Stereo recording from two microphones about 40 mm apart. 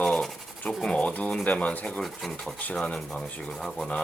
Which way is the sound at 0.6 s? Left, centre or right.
Left.